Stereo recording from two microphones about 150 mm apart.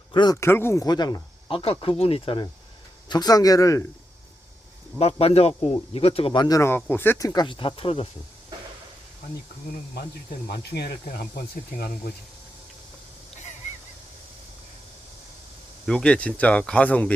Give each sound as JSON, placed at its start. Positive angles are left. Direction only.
{"t": 0.1, "sound": "speech", "side_deg": 30}
{"t": 0.3, "sound": "speech", "side_deg": 15}
{"t": 4.9, "sound": "speech", "side_deg": 40}
{"t": 10.8, "sound": "speech", "side_deg": 90}
{"t": 15.9, "sound": "speech", "side_deg": 5}